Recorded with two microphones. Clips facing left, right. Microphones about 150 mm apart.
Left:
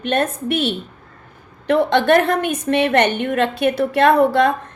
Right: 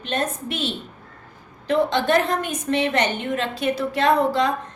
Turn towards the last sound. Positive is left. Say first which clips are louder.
# left 5 dB
turn(degrees=60)  # may be behind; listen again after turning